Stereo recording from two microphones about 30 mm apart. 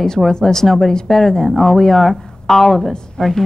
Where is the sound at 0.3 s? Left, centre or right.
Left.